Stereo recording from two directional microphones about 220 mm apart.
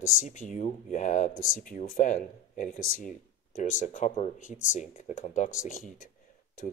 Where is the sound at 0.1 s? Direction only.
35° left (ahead or behind).